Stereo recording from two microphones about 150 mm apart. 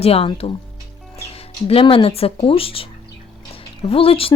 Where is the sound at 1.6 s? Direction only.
40° left (ahead or behind).